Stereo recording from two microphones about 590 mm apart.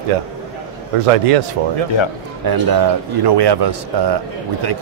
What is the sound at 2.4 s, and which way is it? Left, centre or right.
Speech, right.